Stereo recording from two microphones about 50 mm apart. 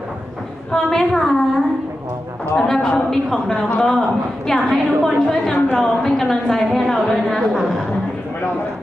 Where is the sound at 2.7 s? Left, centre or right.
Centre.